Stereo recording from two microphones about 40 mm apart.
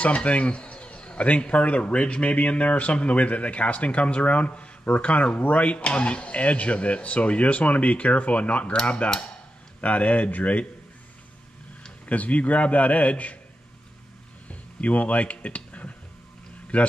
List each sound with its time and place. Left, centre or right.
0.0 s a man's voice: left
12.1 s a man's voice: left
14.5 s a sound: left
16.7 s a man's voice: left